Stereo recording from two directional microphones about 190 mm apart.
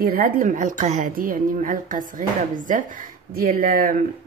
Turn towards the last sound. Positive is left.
turn(degrees=-50)  # may be behind; listen again after turning